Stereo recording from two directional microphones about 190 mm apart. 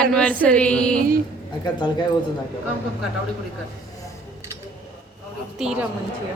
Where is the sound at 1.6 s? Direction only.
25° left (ahead or behind).